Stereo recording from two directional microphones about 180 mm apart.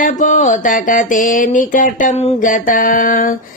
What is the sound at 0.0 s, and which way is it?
Speech, 45° left (ahead or behind).